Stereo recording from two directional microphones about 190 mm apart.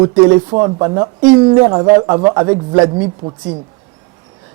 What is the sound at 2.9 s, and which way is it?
Speech, 30° right (ahead or behind).